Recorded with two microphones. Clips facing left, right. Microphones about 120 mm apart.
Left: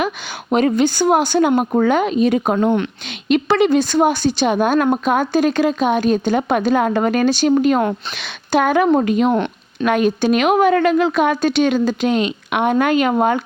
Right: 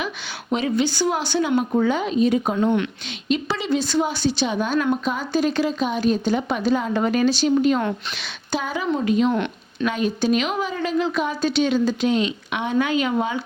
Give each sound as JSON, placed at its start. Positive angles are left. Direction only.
{"t": 0.5, "sound": "speech", "side_deg": 50}
{"t": 2.6, "sound": "a woman's voice", "side_deg": 40}
{"t": 3.2, "sound": "speech", "side_deg": 65}